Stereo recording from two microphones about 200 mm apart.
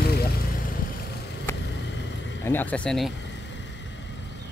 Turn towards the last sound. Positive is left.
turn(degrees=0)  # may be behind; listen again after turning